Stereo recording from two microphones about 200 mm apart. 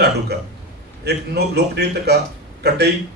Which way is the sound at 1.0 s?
55° right (ahead or behind).